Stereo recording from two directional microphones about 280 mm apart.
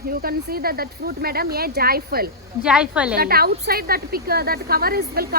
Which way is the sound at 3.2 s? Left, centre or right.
Right.